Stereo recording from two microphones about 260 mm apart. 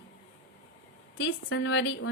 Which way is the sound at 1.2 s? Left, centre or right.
Left.